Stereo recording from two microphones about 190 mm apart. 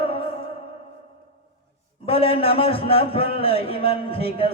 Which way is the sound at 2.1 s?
30° left (ahead or behind).